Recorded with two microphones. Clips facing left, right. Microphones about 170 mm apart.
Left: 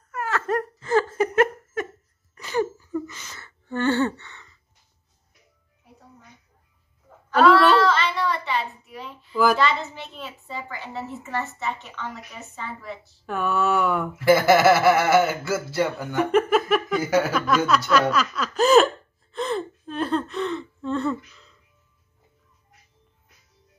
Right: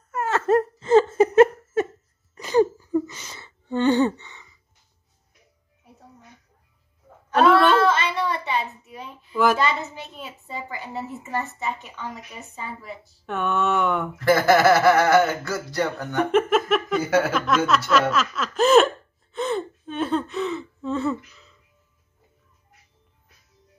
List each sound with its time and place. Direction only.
0.1 s laughter: 25° right (ahead or behind)
2.6 s a sound: 20° right (ahead or behind)
7.8 s child singing: 20° right (ahead or behind)
9.6 s a child's voice: 15° right (ahead or behind)
13.2 s speech: centre (ahead or behind)